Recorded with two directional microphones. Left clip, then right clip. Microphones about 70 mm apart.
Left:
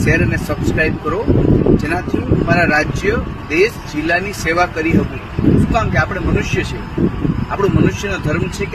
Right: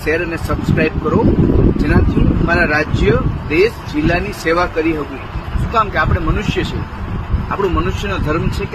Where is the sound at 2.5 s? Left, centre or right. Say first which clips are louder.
Left 1 dB; right.